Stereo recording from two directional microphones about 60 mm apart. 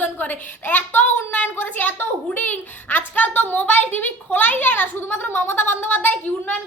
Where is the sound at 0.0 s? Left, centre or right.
Left.